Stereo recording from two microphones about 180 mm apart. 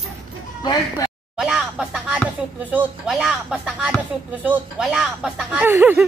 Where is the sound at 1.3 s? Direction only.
5° right (ahead or behind).